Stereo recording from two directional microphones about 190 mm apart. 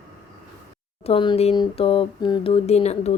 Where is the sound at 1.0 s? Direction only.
25° left (ahead or behind).